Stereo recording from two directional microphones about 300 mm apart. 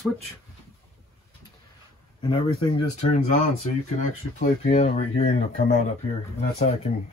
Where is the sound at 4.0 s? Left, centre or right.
Left.